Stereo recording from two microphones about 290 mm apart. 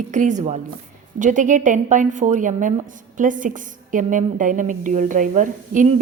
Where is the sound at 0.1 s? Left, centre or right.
Right.